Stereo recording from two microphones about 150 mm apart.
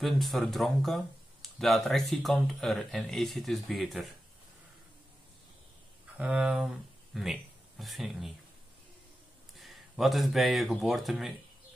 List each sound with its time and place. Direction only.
0.0 s speech: centre (ahead or behind)
6.1 s speech: 10° right (ahead or behind)
9.6 s speech: centre (ahead or behind)